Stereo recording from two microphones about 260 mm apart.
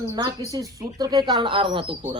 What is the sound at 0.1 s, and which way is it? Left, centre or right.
Speech, centre.